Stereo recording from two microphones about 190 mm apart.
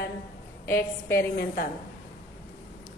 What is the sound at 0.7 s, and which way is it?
Speech, 10° left (ahead or behind).